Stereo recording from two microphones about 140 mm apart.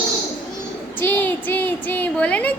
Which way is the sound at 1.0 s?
15° left (ahead or behind).